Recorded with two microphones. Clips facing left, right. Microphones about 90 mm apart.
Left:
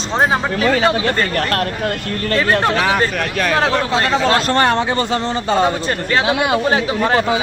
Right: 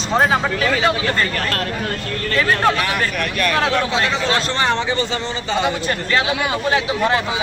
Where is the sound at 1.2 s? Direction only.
45° left (ahead or behind).